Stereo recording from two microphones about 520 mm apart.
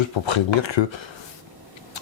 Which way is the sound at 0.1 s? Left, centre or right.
Left.